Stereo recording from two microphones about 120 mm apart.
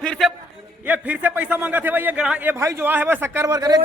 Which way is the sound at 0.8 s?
10° right (ahead or behind).